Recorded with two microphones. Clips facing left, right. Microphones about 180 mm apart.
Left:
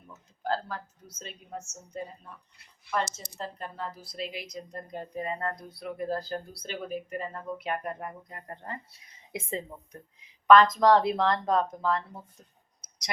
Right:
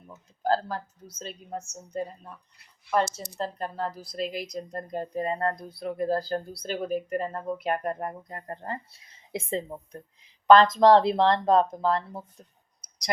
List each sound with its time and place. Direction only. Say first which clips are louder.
0.4 s speech: right 5 dB; 35° right (ahead or behind)
3.3 s a woman's voice: right 6 dB; 40° right (ahead or behind)